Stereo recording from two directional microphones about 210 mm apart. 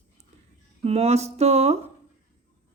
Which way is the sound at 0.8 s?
30° right (ahead or behind).